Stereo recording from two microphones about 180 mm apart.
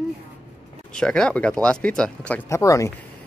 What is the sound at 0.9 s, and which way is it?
Speech, 5° left (ahead or behind).